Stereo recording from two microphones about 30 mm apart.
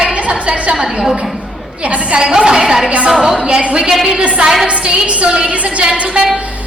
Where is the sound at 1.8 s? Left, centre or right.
Right.